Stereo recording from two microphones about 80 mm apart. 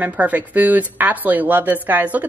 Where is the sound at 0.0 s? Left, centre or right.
Right.